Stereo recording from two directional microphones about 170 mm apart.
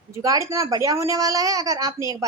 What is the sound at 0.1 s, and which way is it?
A woman's voice, 20° right (ahead or behind).